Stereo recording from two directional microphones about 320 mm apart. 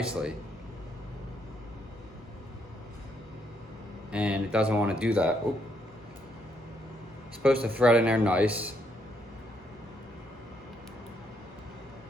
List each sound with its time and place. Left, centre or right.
0.0 s speech: centre
4.1 s speech: centre
7.4 s speech: centre